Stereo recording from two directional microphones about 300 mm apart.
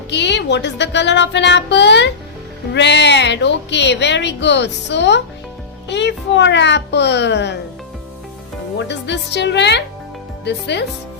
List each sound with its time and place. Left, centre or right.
0.1 s speech: left
8.9 s speech: left